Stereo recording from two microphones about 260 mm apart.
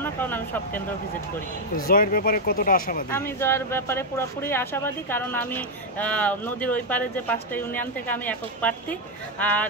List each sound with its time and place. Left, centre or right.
0.0 s speech: centre
1.9 s speech: left
3.1 s speech: centre